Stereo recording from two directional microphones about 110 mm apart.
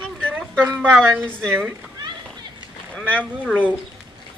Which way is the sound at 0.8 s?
15° right (ahead or behind).